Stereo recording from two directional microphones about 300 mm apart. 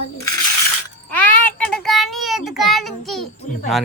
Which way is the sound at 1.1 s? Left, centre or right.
Centre.